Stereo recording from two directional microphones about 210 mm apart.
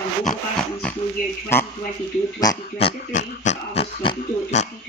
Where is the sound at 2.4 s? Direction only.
20° left (ahead or behind).